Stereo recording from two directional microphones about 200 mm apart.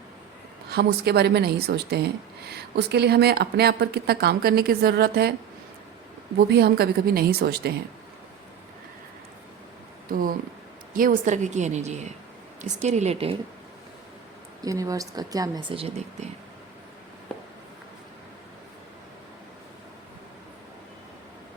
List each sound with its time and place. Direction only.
0.7 s speech: 55° right (ahead or behind)
6.5 s speech: 55° right (ahead or behind)
10.1 s a woman's voice: 45° right (ahead or behind)
14.6 s a woman's voice: 15° right (ahead or behind)